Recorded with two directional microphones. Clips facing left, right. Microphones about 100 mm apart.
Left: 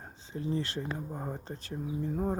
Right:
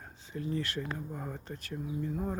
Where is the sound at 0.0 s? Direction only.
30° left (ahead or behind).